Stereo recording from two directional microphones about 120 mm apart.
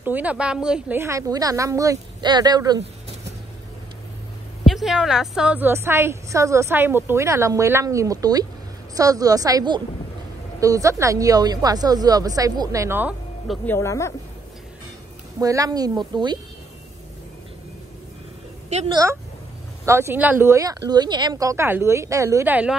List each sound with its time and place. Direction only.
0.0 s speech: 15° right (ahead or behind)
0.9 s speech: 25° right (ahead or behind)
4.6 s a woman's voice: centre (ahead or behind)
5.7 s speech: 20° right (ahead or behind)
13.7 s speech: 25° left (ahead or behind)
15.4 s speech: 30° right (ahead or behind)
18.9 s speech: 30° right (ahead or behind); by 22.8 s 10° right (ahead or behind)